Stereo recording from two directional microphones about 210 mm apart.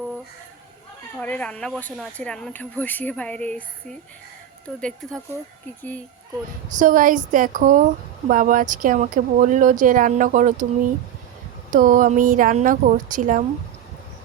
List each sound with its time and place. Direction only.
1.2 s speech: 5° left (ahead or behind)
6.7 s speech: 40° right (ahead or behind)
11.7 s speech: 40° right (ahead or behind)